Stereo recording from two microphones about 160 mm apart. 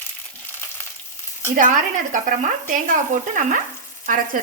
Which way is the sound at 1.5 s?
55° right (ahead or behind).